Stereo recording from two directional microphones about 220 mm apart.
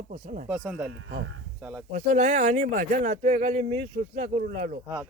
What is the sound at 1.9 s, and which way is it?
Speech, 35° right (ahead or behind).